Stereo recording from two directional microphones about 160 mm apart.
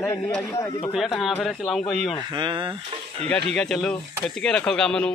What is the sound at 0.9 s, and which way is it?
A man's voice, centre (ahead or behind).